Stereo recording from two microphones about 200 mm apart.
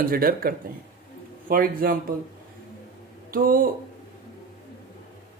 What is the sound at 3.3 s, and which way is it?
Speech, 45° right (ahead or behind).